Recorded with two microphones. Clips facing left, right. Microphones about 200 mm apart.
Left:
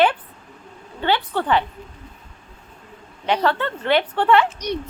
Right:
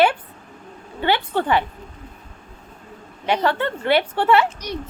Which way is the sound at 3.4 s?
15° right (ahead or behind).